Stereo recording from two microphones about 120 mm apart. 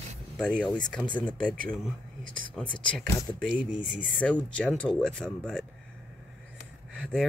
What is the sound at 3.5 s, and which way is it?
Speech, 5° right (ahead or behind).